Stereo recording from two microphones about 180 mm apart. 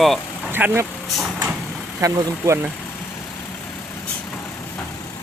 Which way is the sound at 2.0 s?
15° right (ahead or behind).